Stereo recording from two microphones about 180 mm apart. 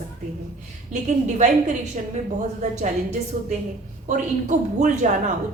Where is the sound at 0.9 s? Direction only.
40° right (ahead or behind).